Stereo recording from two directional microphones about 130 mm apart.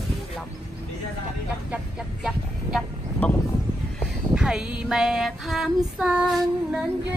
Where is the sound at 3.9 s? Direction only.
5° right (ahead or behind).